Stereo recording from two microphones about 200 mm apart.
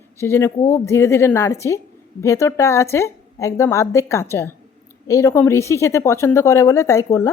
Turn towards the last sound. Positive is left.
turn(degrees=15)  # may be behind; listen again after turning